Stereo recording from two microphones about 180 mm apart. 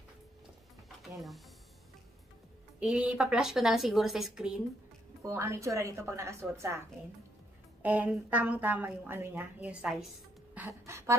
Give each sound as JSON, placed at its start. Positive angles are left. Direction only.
{"t": 1.0, "sound": "a sound", "side_deg": 0}
{"t": 2.8, "sound": "a woman's voice", "side_deg": -5}
{"t": 5.2, "sound": "a woman's voice", "side_deg": -15}
{"t": 7.8, "sound": "a woman's voice", "side_deg": -10}